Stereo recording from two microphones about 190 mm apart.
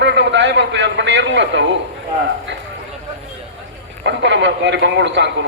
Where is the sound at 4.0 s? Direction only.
70° right (ahead or behind).